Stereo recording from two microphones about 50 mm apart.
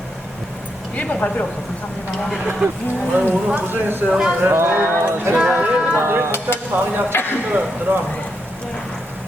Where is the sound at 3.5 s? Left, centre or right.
Right.